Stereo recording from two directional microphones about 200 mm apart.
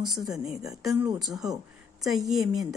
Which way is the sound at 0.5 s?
15° right (ahead or behind).